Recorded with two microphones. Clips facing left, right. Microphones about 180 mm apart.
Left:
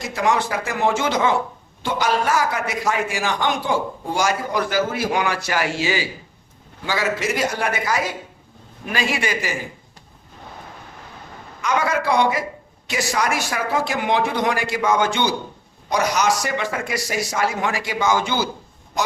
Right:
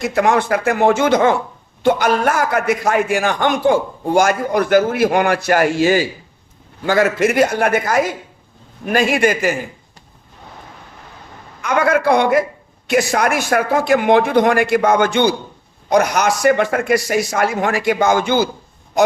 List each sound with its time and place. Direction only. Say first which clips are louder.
0.0 s a man's voice: right 5 dB; 60° right (ahead or behind)
11.6 s a man's voice: right 6 dB; 55° right (ahead or behind)